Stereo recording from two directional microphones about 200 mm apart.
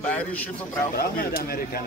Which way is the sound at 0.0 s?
5° left (ahead or behind).